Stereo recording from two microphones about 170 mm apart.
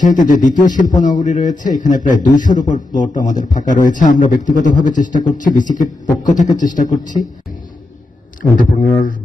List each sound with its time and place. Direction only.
0.0 s a man's voice: 50° left (ahead or behind)